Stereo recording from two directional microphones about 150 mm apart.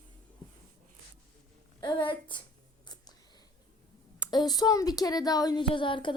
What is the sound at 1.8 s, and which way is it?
Speech, 30° left (ahead or behind).